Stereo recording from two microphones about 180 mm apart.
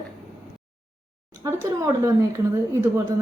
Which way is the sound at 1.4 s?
15° right (ahead or behind).